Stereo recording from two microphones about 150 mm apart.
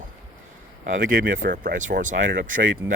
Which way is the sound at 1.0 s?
65° right (ahead or behind).